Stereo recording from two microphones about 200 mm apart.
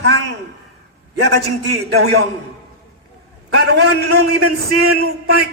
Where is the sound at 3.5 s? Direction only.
55° right (ahead or behind).